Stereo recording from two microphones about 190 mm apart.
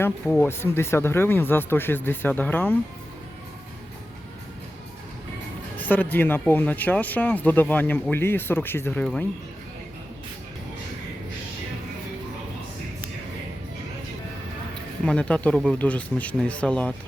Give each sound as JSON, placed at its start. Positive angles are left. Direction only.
{"t": 0.0, "sound": "speech", "side_deg": 10}
{"t": 5.7, "sound": "speech", "side_deg": 10}
{"t": 15.0, "sound": "speech", "side_deg": 5}